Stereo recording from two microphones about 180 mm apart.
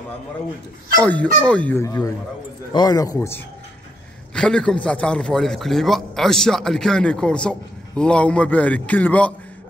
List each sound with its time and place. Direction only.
1.0 s a man's voice: 10° left (ahead or behind)